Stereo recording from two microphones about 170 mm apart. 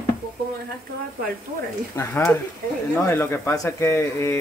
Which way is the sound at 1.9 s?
15° left (ahead or behind).